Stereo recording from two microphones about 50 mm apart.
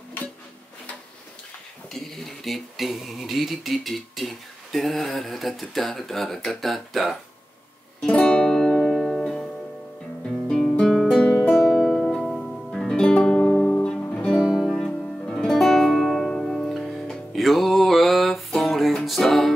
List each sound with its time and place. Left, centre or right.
1.9 s speech: centre
8.1 s music: centre
14.1 s music: centre
14.4 s music: centre